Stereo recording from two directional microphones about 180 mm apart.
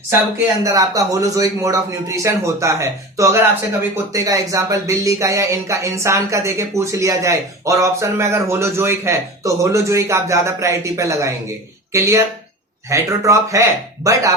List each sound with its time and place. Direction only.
0.6 s speech: 20° right (ahead or behind)